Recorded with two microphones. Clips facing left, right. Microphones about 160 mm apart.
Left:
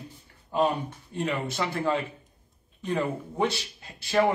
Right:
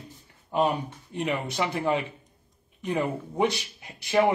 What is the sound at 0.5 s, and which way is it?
Speech, 20° right (ahead or behind).